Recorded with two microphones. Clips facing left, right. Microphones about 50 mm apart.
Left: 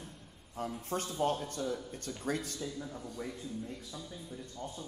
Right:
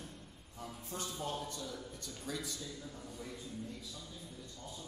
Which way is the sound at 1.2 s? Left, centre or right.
Left.